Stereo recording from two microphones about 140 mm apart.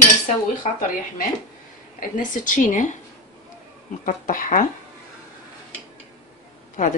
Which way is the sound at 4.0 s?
70° left (ahead or behind).